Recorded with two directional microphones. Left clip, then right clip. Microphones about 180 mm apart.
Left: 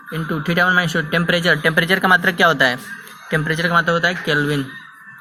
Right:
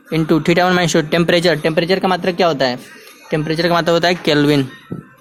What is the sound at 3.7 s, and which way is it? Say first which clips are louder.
Speech: right 2 dB; 40° right (ahead or behind).